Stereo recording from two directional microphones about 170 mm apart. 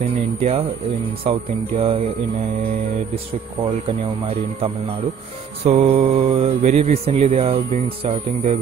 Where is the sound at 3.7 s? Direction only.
35° right (ahead or behind).